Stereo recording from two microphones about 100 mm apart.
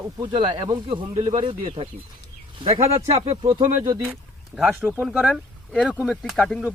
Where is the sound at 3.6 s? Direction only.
45° right (ahead or behind).